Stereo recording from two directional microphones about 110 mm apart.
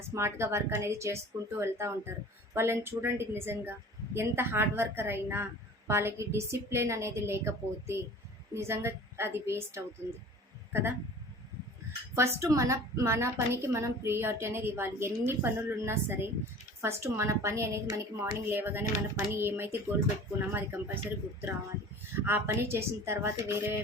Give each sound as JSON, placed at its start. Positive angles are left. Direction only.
{"t": 0.1, "sound": "a woman's voice", "side_deg": -25}
{"t": 12.1, "sound": "a woman's voice", "side_deg": -25}
{"t": 22.3, "sound": "a woman's voice", "side_deg": -25}